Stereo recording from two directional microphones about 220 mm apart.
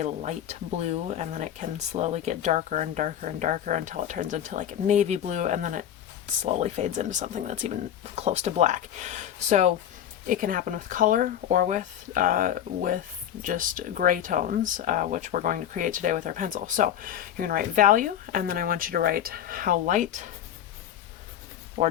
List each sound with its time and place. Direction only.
0.0 s speech: 30° right (ahead or behind)
21.8 s speech: 30° right (ahead or behind)